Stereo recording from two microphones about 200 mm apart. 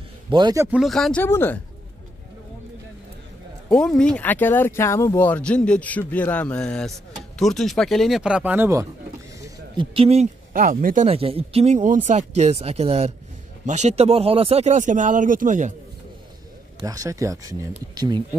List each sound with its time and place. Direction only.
0.3 s a man's voice: 20° right (ahead or behind)
0.7 s speech: centre (ahead or behind)
3.7 s speech: 5° left (ahead or behind); by 8.8 s 10° right (ahead or behind)
9.8 s speech: 30° right (ahead or behind)
10.5 s speech: 45° right (ahead or behind)
11.1 s speech: 30° right (ahead or behind)
16.8 s a man's voice: 15° right (ahead or behind)